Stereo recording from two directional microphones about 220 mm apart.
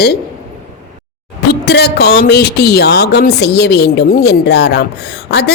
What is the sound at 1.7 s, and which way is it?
A woman's voice, 50° left (ahead or behind).